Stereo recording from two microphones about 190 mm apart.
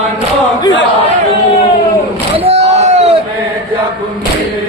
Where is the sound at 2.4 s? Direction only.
35° right (ahead or behind).